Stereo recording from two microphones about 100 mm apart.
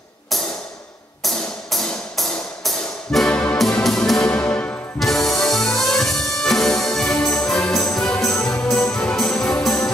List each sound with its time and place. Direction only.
1.2 s music: centre (ahead or behind)
4.4 s music: 15° left (ahead or behind)
4.9 s music: 5° left (ahead or behind)